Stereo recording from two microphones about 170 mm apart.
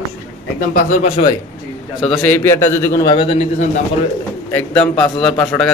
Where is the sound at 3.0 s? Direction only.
30° left (ahead or behind).